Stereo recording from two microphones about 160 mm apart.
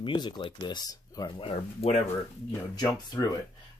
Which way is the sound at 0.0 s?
30° left (ahead or behind).